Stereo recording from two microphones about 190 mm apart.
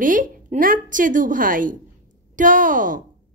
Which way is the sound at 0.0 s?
45° right (ahead or behind).